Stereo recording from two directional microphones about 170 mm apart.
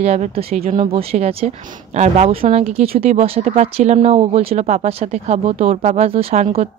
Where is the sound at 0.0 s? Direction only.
40° right (ahead or behind).